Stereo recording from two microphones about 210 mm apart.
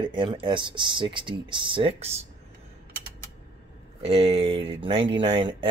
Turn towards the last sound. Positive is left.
turn(degrees=-25)  # may be behind; listen again after turning